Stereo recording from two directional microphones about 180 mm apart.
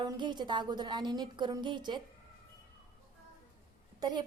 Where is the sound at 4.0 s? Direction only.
25° right (ahead or behind).